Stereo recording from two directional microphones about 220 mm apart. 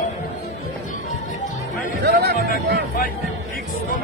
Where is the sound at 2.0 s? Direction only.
45° right (ahead or behind).